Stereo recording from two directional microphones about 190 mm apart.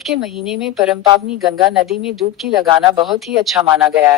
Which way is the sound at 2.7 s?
25° right (ahead or behind).